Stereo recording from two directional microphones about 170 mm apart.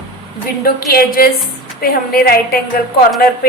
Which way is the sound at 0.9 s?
60° left (ahead or behind).